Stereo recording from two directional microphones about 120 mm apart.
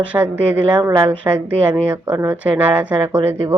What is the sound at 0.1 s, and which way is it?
Speech, 15° right (ahead or behind).